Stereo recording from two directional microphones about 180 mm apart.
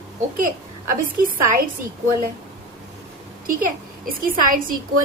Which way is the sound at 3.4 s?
50° right (ahead or behind).